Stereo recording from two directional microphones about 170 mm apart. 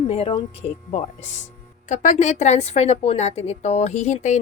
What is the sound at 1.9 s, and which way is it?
A woman's voice, 45° left (ahead or behind).